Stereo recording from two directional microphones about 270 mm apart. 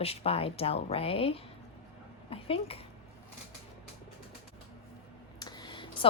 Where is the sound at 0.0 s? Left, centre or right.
Left.